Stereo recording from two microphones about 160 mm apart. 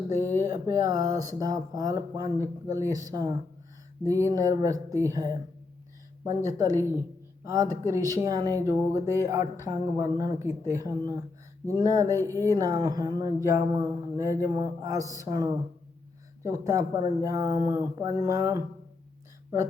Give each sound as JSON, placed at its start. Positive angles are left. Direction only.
{"t": 0.3, "sound": "speech", "side_deg": -20}